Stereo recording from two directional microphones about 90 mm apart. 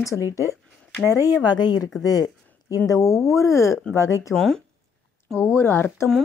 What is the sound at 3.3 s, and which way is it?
Speech, 35° left (ahead or behind).